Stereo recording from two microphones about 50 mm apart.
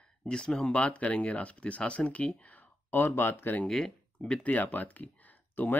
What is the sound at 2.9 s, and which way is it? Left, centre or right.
Speech, left.